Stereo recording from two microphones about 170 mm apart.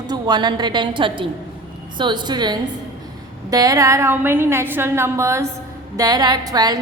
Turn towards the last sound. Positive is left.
turn(degrees=-25)  # may be behind; listen again after turning